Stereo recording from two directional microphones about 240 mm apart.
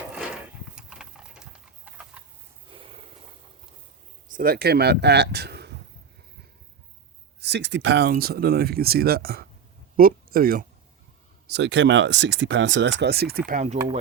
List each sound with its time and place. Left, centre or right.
0.8 s horse: centre
2.6 s a sound: right
4.3 s speech: right
7.4 s speech: right